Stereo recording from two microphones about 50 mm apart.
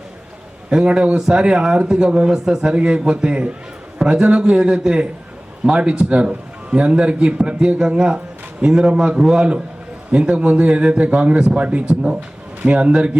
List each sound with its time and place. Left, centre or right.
0.7 s a man's voice: centre
10.1 s a man's voice: right